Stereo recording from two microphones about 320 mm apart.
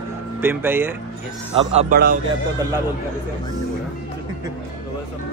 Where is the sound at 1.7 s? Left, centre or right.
Right.